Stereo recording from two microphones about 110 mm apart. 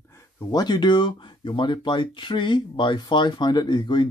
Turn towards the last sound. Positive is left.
turn(degrees=40)  # may be behind; listen again after turning